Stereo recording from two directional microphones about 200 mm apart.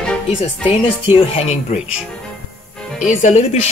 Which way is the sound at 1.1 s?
30° left (ahead or behind).